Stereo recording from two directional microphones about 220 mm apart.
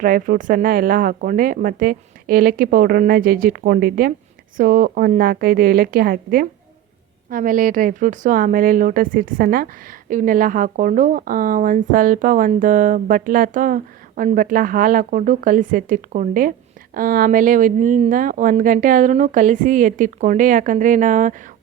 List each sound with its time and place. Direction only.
0.0 s speech: 40° right (ahead or behind)